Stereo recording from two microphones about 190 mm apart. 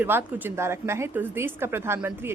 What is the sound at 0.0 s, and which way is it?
A woman's voice, 10° right (ahead or behind).